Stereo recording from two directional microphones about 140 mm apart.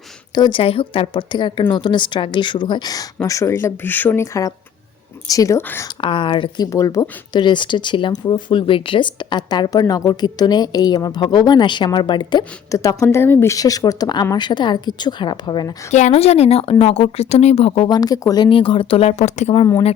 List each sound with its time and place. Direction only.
0.3 s a woman's voice: 35° left (ahead or behind); by 5.9 s 15° left (ahead or behind)
6.0 s speech: 35° left (ahead or behind)
6.7 s speech: 25° left (ahead or behind)
15.9 s speech: 55° left (ahead or behind)
17.8 s a woman's voice: 30° left (ahead or behind)
18.4 s speech: 40° left (ahead or behind)